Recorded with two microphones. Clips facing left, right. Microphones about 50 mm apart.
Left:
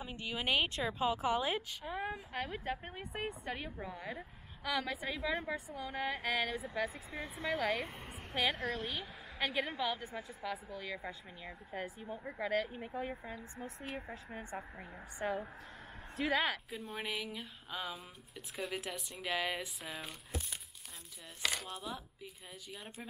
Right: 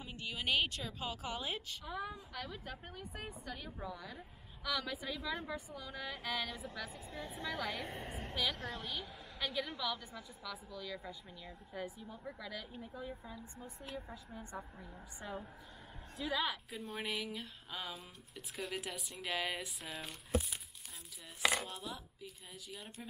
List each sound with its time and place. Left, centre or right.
0.0 s a woman's voice: left
3.8 s a woman's voice: left; by 8.4 s centre
8.4 s a woman's voice: left
8.8 s a woman's voice: centre
9.4 s a woman's voice: left
12.8 s speech: left
16.2 s speech: left
16.7 s speech: centre
21.5 s speech: centre